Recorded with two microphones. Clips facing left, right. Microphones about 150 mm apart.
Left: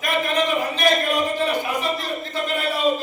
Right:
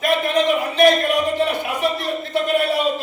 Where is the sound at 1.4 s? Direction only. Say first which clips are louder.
Right 2 dB; 65° right (ahead or behind).